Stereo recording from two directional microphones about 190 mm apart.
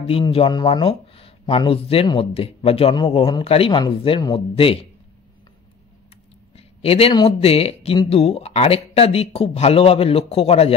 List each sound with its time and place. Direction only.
0.0 s speech: 30° left (ahead or behind)
6.5 s speech: 30° left (ahead or behind)